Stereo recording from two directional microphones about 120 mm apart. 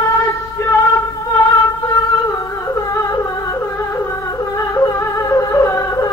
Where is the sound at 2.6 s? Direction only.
25° left (ahead or behind).